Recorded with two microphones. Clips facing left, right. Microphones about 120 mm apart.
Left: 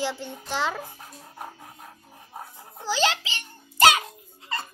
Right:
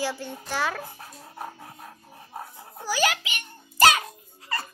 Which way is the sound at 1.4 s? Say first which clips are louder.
Right 2 dB; 5° right (ahead or behind).